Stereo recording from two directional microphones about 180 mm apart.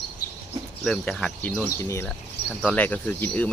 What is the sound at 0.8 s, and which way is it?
Speech, centre (ahead or behind).